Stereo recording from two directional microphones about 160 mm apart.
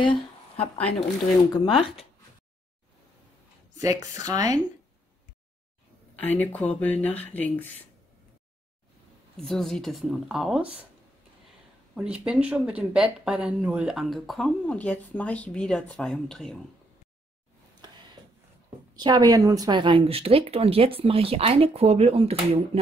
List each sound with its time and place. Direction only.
0.0 s a sound: 30° left (ahead or behind)
1.5 s speech: 30° left (ahead or behind)
3.7 s speech: 20° right (ahead or behind)
6.1 s speech: 10° left (ahead or behind)
9.4 s speech: 5° left (ahead or behind)
11.9 s speech: 5° right (ahead or behind)
17.8 s a sound: 25° right (ahead or behind)
18.9 s speech: 25° right (ahead or behind)